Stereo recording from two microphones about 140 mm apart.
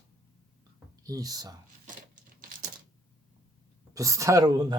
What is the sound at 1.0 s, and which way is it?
Speech, 25° right (ahead or behind).